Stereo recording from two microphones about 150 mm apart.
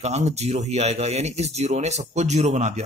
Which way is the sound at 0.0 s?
50° right (ahead or behind).